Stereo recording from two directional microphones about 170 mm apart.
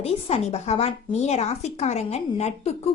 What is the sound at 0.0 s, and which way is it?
A woman's voice, 40° left (ahead or behind).